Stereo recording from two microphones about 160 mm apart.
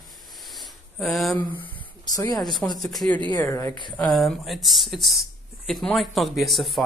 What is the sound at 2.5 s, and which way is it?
Speech, 25° left (ahead or behind).